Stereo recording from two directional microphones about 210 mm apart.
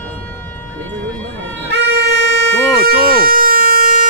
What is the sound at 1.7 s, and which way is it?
Vehicle, 55° right (ahead or behind).